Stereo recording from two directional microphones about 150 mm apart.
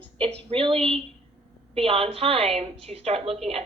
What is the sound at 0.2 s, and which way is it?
A woman's voice, 35° right (ahead or behind).